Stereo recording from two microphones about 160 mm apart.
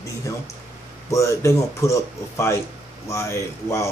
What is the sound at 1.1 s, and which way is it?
Speech, 20° left (ahead or behind).